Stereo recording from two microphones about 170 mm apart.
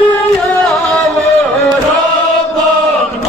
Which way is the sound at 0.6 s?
Centre (ahead or behind).